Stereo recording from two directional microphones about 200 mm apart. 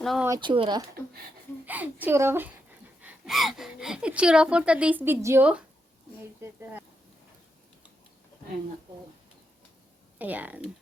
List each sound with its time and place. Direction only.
0.0 s speech: centre (ahead or behind)
0.3 s speech: 25° right (ahead or behind)
1.6 s a woman's voice: 10° right (ahead or behind)
10.2 s speech: 10° right (ahead or behind)